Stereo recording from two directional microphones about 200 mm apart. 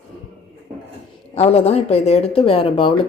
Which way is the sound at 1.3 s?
30° left (ahead or behind).